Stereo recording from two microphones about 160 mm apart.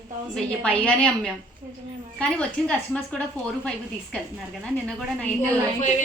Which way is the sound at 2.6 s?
5° left (ahead or behind).